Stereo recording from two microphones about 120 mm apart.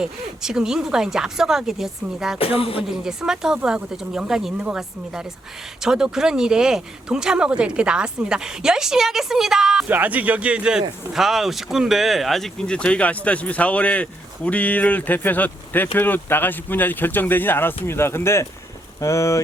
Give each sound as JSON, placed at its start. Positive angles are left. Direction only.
{"t": 0.0, "sound": "speech", "side_deg": -5}
{"t": 2.4, "sound": "a sound", "side_deg": 50}
{"t": 2.8, "sound": "speech", "side_deg": -5}